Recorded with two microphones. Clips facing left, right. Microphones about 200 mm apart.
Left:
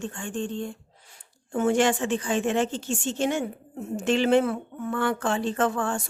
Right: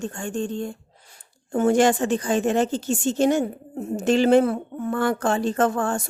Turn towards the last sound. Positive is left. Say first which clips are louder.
# right 4 dB
turn(degrees=-40)  # may be behind; listen again after turning